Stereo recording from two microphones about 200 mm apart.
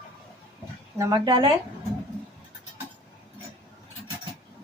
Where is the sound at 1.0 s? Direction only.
20° right (ahead or behind).